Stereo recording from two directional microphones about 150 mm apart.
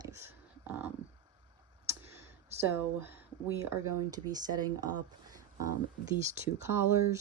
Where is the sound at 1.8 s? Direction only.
15° right (ahead or behind).